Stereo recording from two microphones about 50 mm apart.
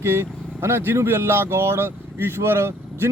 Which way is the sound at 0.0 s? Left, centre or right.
Right.